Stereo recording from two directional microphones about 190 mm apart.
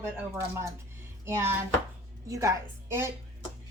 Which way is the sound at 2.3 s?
15° right (ahead or behind).